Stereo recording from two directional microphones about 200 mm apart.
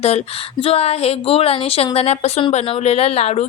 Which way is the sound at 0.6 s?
30° left (ahead or behind).